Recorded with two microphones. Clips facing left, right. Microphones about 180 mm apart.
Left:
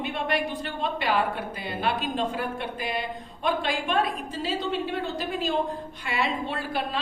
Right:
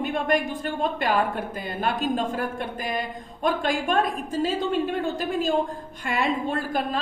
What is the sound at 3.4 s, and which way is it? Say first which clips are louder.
A woman's voice: right 3 dB; 45° right (ahead or behind).